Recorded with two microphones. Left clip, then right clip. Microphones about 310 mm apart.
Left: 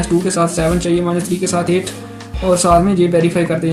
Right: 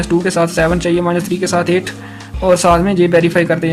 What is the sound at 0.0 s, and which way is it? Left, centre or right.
Speech, right.